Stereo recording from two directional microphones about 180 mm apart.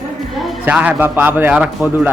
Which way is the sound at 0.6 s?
10° right (ahead or behind).